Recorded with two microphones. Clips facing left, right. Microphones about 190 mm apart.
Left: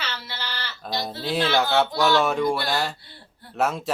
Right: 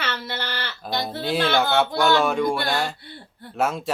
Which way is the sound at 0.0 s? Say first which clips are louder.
Right 5 dB; 55° right (ahead or behind).